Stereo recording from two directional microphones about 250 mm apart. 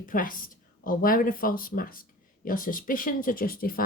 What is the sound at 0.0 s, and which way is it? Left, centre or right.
Speech, left.